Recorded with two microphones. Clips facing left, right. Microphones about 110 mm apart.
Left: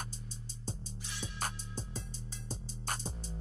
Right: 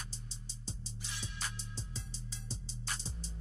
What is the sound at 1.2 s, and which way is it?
Music, 50° left (ahead or behind).